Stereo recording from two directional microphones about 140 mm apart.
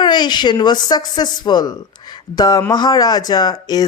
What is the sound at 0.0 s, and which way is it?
Speech, 30° left (ahead or behind).